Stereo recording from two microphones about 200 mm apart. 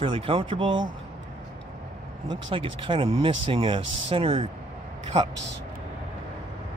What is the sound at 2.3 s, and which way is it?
Speech, 25° right (ahead or behind).